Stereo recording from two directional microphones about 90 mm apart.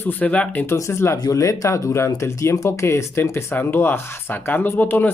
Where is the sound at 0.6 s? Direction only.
35° left (ahead or behind).